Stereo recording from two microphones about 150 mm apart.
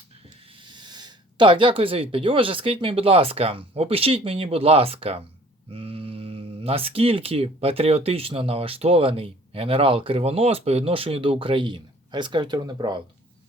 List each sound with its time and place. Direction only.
0.6 s speech: 30° right (ahead or behind)